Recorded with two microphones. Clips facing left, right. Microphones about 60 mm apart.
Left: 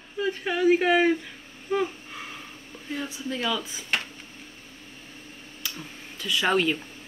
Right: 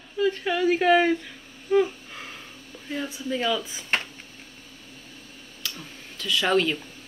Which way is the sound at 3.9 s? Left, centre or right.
Right.